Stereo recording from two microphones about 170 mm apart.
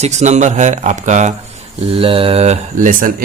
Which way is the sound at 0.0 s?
40° right (ahead or behind).